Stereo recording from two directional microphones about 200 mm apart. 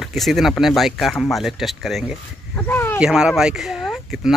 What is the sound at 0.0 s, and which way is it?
Speech, centre (ahead or behind).